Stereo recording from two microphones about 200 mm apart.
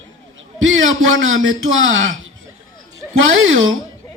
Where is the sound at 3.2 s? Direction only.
80° right.